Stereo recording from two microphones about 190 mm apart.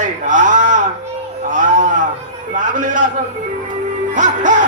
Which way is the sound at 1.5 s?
45° right (ahead or behind).